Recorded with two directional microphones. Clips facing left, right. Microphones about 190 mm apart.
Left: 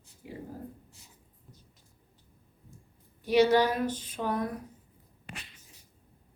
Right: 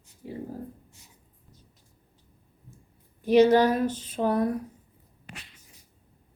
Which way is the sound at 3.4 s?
35° right (ahead or behind).